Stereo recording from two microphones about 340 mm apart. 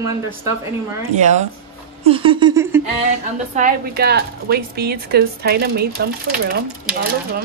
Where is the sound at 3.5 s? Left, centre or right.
Right.